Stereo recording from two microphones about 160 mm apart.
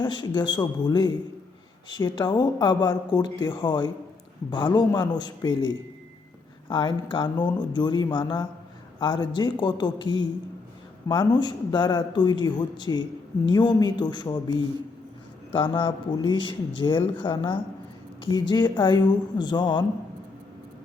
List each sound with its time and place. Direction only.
0.0 s a man's voice: 25° left (ahead or behind)
15.5 s a man's voice: 30° left (ahead or behind)